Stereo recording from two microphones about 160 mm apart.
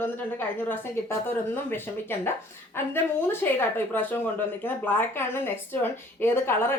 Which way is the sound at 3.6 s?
10° left (ahead or behind).